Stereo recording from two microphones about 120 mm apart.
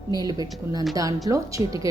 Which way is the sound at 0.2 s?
30° right (ahead or behind).